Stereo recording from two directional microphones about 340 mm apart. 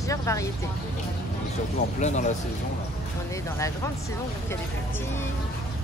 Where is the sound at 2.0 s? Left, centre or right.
Left.